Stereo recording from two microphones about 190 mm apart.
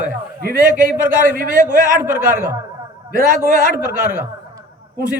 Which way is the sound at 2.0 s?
10° right (ahead or behind).